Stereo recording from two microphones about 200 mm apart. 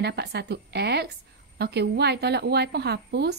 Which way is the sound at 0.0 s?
55° right (ahead or behind).